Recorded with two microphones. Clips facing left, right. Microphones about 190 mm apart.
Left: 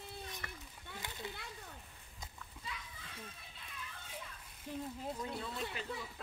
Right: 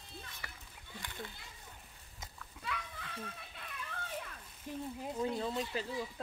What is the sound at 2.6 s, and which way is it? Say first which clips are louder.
Children playing: right 7 dB; 70° right (ahead or behind).